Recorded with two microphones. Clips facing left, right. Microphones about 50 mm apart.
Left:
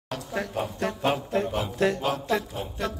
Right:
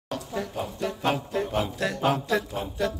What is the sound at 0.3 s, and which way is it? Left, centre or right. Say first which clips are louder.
Speech: left 3 dB; left.